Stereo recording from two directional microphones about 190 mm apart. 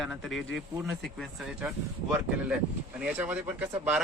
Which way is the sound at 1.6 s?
10° right (ahead or behind).